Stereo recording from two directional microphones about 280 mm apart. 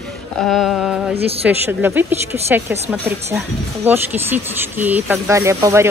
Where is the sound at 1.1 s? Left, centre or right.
Right.